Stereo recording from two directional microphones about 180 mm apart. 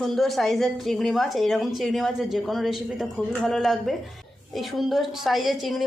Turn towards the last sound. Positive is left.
turn(degrees=0)  # may be behind; listen again after turning